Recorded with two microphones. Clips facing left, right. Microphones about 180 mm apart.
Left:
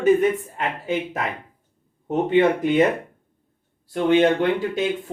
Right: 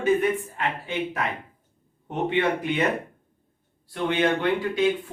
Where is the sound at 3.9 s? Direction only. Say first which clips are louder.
Left 7 dB; 40° left (ahead or behind).